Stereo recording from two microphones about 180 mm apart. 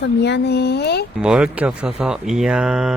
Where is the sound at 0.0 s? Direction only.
75° left (ahead or behind).